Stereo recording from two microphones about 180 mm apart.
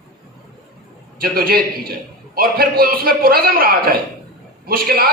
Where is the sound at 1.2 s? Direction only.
55° right (ahead or behind).